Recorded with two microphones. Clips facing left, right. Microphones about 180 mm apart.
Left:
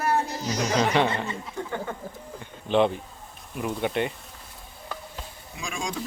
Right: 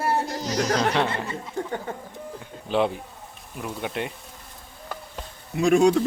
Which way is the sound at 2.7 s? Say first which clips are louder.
Left 2 dB; 5° right (ahead or behind).